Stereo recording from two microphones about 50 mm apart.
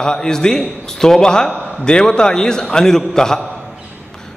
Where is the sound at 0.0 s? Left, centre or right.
Centre.